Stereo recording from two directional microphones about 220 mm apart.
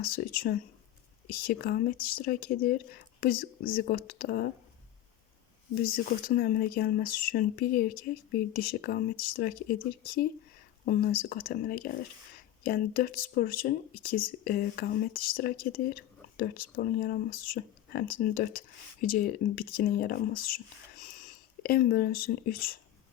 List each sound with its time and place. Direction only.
0.0 s speech: 40° left (ahead or behind)
5.8 s speech: 40° left (ahead or behind)